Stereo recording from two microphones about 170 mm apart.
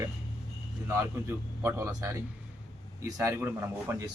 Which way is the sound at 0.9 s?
15° right (ahead or behind).